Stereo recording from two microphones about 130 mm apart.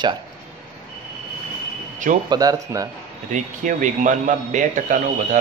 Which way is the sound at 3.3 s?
75° right (ahead or behind).